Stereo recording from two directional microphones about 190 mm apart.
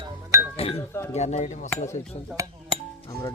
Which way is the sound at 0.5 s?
30° left (ahead or behind).